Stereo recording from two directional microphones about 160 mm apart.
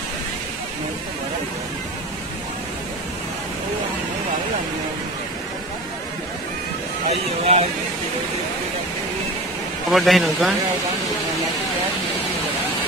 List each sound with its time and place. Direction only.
7.1 s speech: 40° right (ahead or behind)
9.8 s speech: centre (ahead or behind)